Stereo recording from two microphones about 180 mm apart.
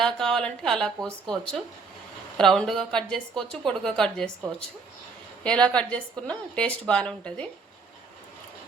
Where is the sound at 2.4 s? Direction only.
5° left (ahead or behind).